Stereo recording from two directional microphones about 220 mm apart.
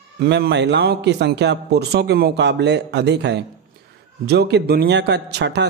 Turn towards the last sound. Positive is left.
turn(degrees=-50)  # may be behind; listen again after turning